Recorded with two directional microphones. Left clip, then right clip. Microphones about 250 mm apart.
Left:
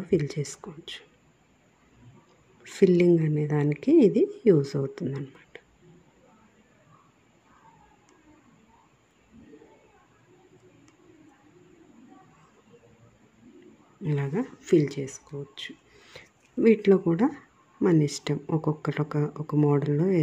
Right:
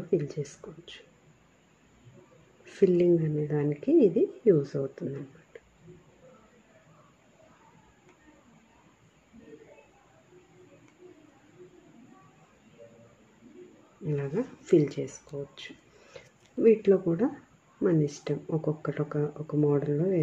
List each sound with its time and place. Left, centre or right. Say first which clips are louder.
0.1 s speech: left 3 dB; left
2.6 s speech: left 3 dB; left
14.0 s speech: left 1 dB; left